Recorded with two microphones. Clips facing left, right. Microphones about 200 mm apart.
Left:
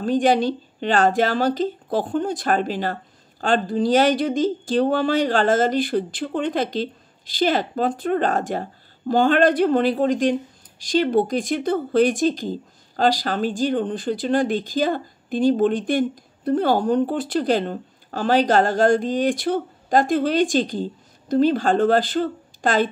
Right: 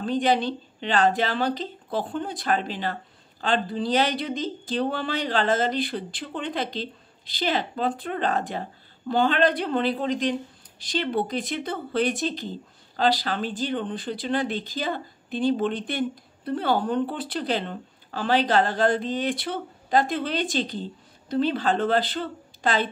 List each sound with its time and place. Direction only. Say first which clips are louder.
0.0 s speech: left 5 dB; 45° left (ahead or behind)